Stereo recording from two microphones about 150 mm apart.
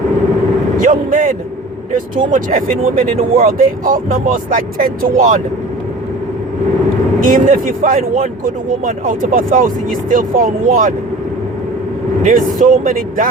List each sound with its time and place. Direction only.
0.8 s a sound: 60° right (ahead or behind)
2.3 s speech: 65° right (ahead or behind)
7.3 s speech: 65° right (ahead or behind)
12.2 s speech: 65° right (ahead or behind)